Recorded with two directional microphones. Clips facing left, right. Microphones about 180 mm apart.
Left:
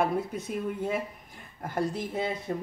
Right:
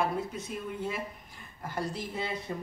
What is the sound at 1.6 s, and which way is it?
Speech, 50° left (ahead or behind).